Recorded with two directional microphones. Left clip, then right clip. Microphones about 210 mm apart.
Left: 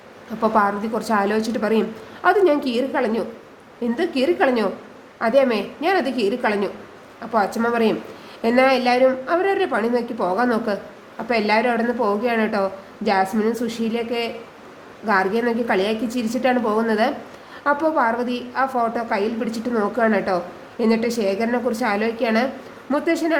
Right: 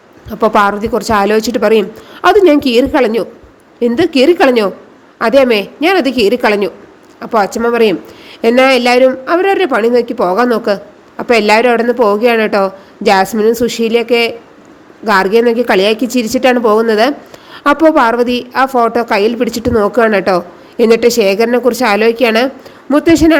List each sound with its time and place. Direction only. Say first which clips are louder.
0.3 s a woman's voice: right 9 dB; 35° right (ahead or behind)